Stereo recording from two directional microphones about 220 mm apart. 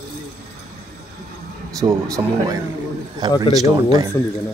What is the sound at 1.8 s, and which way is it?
Speech, 15° right (ahead or behind).